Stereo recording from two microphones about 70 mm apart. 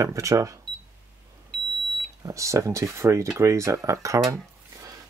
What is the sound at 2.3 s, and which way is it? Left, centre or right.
Speech, right.